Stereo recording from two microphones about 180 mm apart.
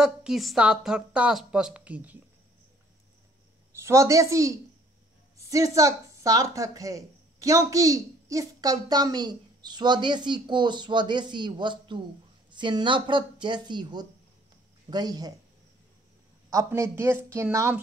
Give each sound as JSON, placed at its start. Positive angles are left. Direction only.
{"t": 0.0, "sound": "a woman's voice", "side_deg": -5}
{"t": 3.8, "sound": "speech", "side_deg": -15}
{"t": 16.4, "sound": "speech", "side_deg": -15}